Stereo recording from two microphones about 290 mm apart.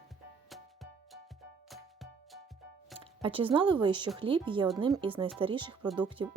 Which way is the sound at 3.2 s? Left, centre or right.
Centre.